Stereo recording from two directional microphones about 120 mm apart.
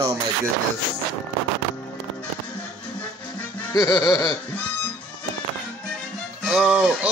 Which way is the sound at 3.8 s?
30° left (ahead or behind).